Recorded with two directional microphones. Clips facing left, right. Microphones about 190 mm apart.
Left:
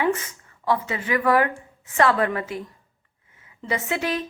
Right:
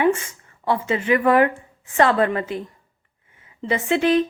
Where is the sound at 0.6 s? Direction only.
25° right (ahead or behind).